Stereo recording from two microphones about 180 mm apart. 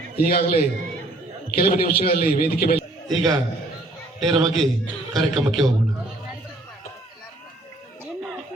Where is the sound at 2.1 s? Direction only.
50° left (ahead or behind).